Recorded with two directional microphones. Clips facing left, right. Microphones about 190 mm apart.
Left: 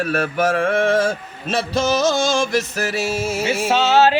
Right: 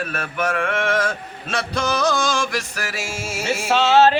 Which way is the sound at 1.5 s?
25° left (ahead or behind).